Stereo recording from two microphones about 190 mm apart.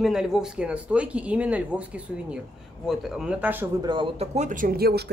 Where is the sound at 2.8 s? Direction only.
5° right (ahead or behind).